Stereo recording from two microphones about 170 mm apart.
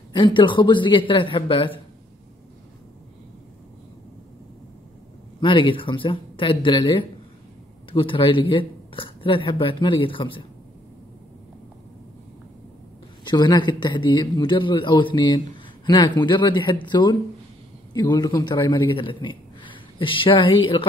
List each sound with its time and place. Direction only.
0.1 s a man's voice: 30° left (ahead or behind)
5.4 s a man's voice: 30° left (ahead or behind)
13.2 s a man's voice: 25° left (ahead or behind)